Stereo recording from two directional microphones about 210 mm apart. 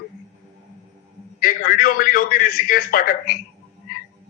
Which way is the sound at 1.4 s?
40° left (ahead or behind).